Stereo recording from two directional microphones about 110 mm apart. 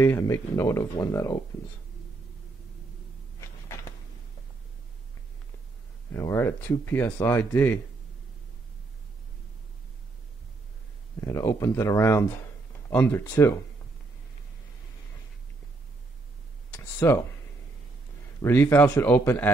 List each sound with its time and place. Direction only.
0.0 s speech: 20° left (ahead or behind)
3.3 s a sound: 30° left (ahead or behind)
6.1 s speech: 25° left (ahead or behind)
11.1 s speech: 25° left (ahead or behind)
17.0 s speech: 25° left (ahead or behind)
18.4 s speech: 25° left (ahead or behind)